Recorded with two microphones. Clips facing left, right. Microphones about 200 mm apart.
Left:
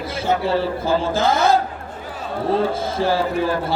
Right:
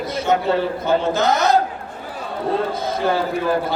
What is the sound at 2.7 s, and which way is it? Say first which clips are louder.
A man's voice: even; 30° left (ahead or behind).